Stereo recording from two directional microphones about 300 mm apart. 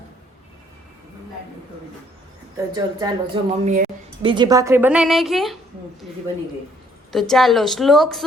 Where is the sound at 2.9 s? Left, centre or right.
Centre.